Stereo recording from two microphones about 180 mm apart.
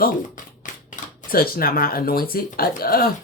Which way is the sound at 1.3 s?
55° left (ahead or behind).